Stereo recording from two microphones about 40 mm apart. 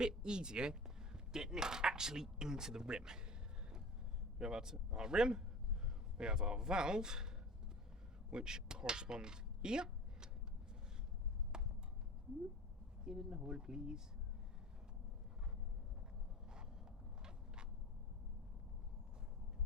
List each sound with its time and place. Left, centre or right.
0.0 s speech: right
4.4 s speech: centre
8.3 s speech: centre
11.5 s a sound: centre
13.1 s speech: centre